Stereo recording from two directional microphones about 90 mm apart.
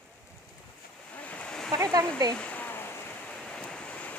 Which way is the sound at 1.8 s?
45° right (ahead or behind).